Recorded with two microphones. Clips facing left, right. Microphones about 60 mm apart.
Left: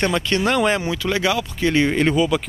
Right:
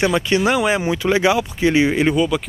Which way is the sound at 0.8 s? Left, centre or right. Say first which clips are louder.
Right 4 dB; right.